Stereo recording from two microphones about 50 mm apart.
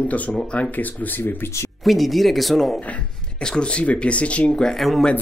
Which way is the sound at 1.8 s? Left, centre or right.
Centre.